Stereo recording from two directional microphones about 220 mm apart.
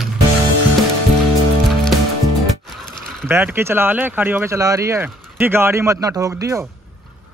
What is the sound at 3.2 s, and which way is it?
Speech, 10° right (ahead or behind).